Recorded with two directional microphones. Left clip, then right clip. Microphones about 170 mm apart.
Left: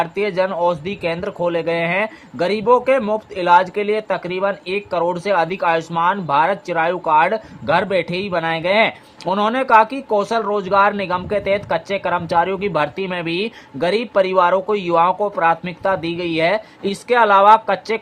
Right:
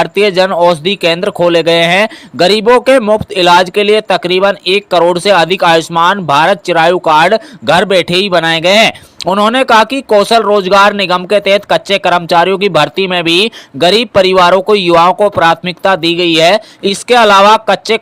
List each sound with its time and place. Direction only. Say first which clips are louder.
0.0 s speech: right 10 dB; 35° right (ahead or behind)